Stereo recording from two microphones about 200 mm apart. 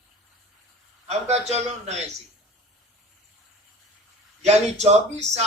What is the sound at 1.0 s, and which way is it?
A man's voice, 30° right (ahead or behind).